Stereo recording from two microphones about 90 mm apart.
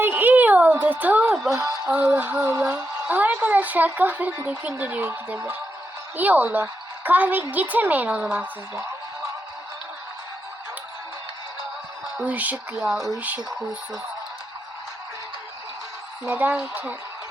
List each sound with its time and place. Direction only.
0.0 s a sound: 20° right (ahead or behind)
1.3 s speech: centre (ahead or behind)
1.9 s a woman's voice: 20° right (ahead or behind)
12.1 s speech: 20° right (ahead or behind)
16.5 s a woman's voice: 25° right (ahead or behind)